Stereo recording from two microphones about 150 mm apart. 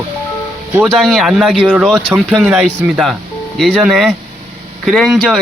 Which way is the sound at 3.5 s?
Centre (ahead or behind).